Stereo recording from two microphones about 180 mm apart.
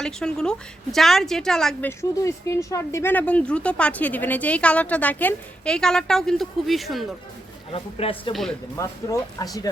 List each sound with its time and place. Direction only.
0.0 s a woman's voice: 5° left (ahead or behind)
1.9 s speech: 15° left (ahead or behind); by 7.1 s centre (ahead or behind)
7.7 s speech: 30° left (ahead or behind)
8.3 s a woman's voice: centre (ahead or behind)
8.7 s speech: 20° left (ahead or behind)